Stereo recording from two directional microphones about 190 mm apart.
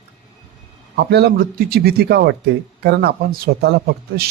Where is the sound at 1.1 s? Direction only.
60° right (ahead or behind).